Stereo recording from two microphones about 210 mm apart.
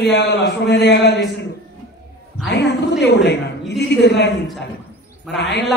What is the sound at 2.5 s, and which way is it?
A woman's voice, 55° left (ahead or behind).